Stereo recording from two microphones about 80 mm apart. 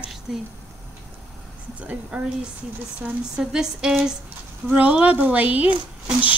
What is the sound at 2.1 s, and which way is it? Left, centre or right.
Speech, centre.